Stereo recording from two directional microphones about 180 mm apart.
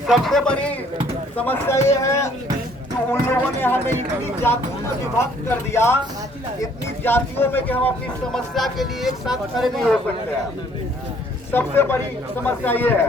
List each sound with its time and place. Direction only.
0.1 s a man's voice: centre (ahead or behind)
5.1 s speech: 15° left (ahead or behind)
7.0 s speech: 10° left (ahead or behind)
11.5 s speech: 15° left (ahead or behind)